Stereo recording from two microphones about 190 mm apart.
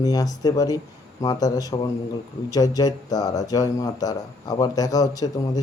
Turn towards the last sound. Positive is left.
turn(degrees=20)  # may be behind; listen again after turning